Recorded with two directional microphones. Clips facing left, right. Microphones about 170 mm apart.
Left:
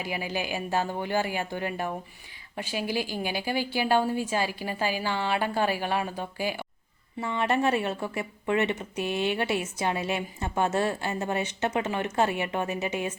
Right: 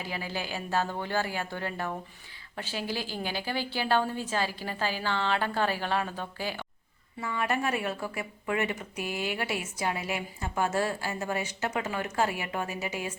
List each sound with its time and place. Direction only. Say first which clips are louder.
0.0 s a woman's voice: left 4 dB; 15° left (ahead or behind)
7.2 s a woman's voice: left 4 dB; 25° left (ahead or behind)